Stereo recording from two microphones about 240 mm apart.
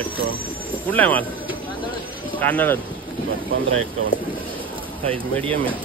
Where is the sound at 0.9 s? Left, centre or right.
Centre.